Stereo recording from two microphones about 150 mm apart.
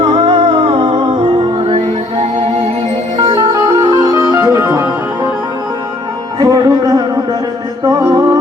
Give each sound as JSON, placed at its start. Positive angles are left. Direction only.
{"t": 0.2, "sound": "music", "side_deg": -40}
{"t": 3.2, "sound": "music", "side_deg": -25}
{"t": 6.4, "sound": "music", "side_deg": -25}